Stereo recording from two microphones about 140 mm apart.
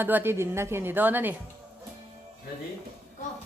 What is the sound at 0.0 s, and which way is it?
Snicker, 15° right (ahead or behind).